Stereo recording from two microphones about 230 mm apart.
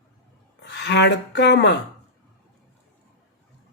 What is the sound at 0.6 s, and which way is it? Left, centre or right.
Speech, left.